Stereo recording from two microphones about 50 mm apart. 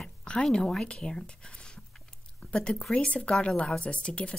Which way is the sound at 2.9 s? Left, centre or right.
Left.